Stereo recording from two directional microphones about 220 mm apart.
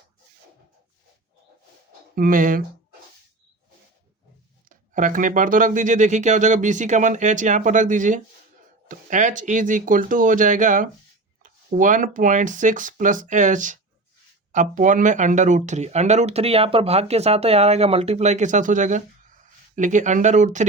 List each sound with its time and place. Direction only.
2.1 s speech: 40° right (ahead or behind)
4.7 s speech: 35° right (ahead or behind)